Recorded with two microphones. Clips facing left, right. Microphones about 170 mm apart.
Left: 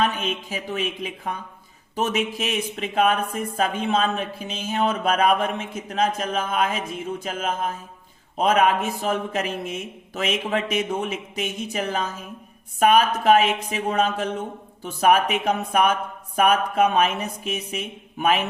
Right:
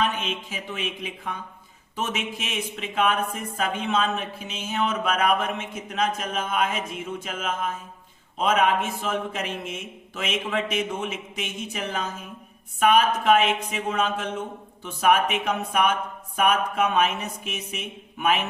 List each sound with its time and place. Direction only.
0.2 s speech: 40° left (ahead or behind)